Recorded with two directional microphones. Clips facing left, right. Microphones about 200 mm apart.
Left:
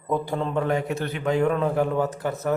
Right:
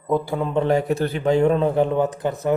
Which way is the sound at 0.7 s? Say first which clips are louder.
Right 6 dB; 35° right (ahead or behind).